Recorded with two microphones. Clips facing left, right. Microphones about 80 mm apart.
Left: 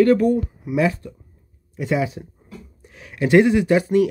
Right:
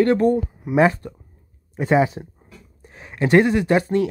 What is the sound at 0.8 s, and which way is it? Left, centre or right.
Speech, right.